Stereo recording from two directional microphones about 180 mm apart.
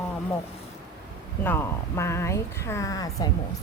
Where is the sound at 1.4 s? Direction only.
10° left (ahead or behind).